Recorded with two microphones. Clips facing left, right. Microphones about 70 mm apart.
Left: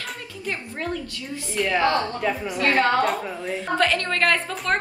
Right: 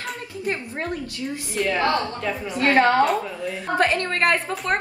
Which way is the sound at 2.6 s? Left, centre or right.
Right.